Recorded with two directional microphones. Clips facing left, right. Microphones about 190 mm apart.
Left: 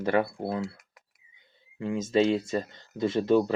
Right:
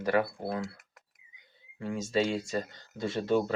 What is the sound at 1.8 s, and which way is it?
Speech, 20° left (ahead or behind).